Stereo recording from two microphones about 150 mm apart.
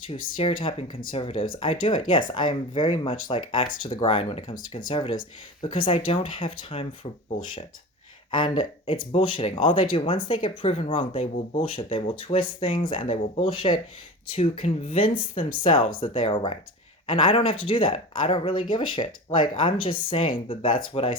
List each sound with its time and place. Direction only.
0.1 s speech: 35° left (ahead or behind)
8.3 s speech: 30° left (ahead or behind)